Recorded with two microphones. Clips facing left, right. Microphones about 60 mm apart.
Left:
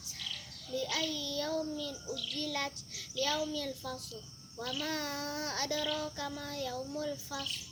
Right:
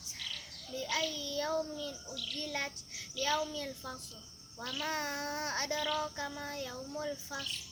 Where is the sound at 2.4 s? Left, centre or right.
Right.